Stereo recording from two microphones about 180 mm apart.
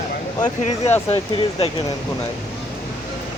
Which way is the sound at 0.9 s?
10° left (ahead or behind).